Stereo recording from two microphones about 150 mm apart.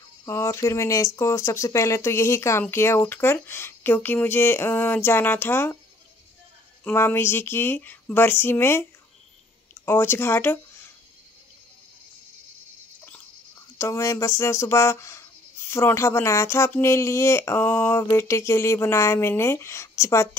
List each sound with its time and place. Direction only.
0.2 s speech: 20° left (ahead or behind)
6.8 s speech: 15° left (ahead or behind)
9.8 s speech: 15° left (ahead or behind)
13.7 s speech: 20° left (ahead or behind)